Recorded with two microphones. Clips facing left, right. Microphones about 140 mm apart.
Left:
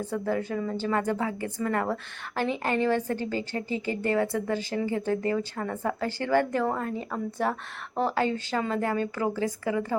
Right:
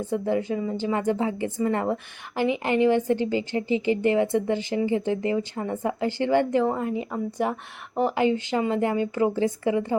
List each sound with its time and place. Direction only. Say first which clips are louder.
0.1 s a woman's voice: right 5 dB; 20° right (ahead or behind)